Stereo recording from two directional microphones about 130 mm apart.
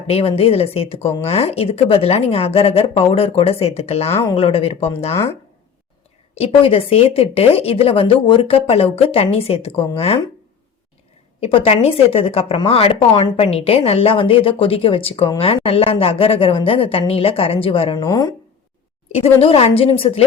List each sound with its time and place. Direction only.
0.1 s speech: 50° left (ahead or behind)
6.3 s speech: 45° left (ahead or behind)
11.3 s speech: 45° left (ahead or behind)
17.9 s speech: 30° left (ahead or behind)
19.4 s speech: 50° left (ahead or behind)